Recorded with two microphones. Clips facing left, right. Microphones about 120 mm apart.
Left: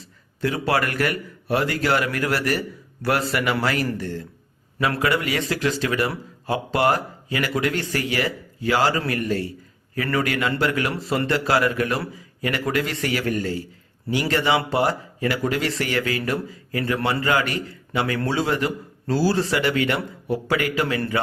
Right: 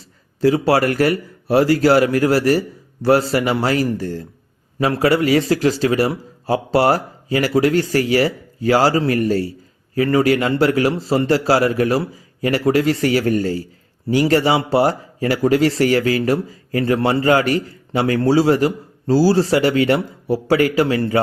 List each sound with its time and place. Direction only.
0.4 s a man's voice: 35° right (ahead or behind)